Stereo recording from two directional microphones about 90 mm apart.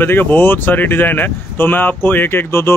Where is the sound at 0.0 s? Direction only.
20° left (ahead or behind).